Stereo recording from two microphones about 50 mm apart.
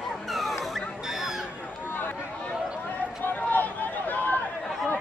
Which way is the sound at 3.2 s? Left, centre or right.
Left.